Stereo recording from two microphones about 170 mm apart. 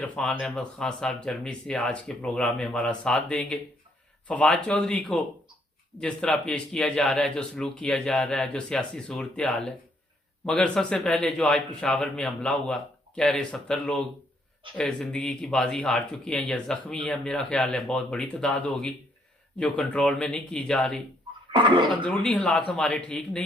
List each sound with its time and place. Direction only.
0.0 s speech: 5° left (ahead or behind)
21.5 s speech: 30° right (ahead or behind)
22.0 s speech: 5° left (ahead or behind)